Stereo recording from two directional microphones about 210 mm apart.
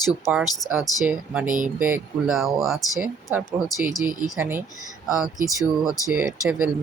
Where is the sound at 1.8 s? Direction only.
5° right (ahead or behind).